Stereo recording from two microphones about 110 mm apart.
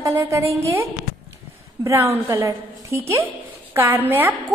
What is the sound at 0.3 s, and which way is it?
Speech, 25° right (ahead or behind).